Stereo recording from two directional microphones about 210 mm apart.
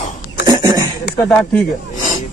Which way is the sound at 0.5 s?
20° right (ahead or behind).